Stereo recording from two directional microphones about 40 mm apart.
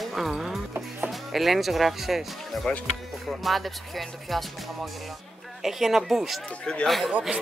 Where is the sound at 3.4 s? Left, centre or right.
Centre.